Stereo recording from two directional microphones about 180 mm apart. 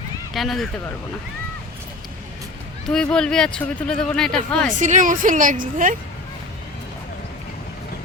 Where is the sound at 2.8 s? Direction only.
5° left (ahead or behind).